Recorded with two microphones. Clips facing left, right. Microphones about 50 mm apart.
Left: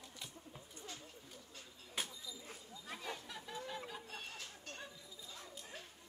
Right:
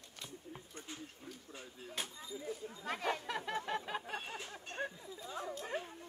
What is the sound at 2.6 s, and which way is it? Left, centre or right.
Chatter, right.